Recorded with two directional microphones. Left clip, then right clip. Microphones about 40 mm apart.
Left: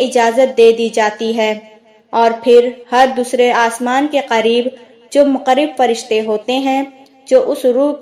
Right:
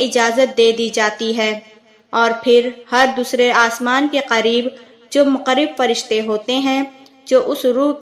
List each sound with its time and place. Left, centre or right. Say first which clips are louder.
0.0 s a woman's voice: left 3 dB; left